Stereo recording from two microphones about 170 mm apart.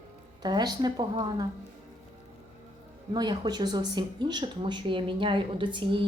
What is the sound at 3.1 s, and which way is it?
Speech, 25° right (ahead or behind).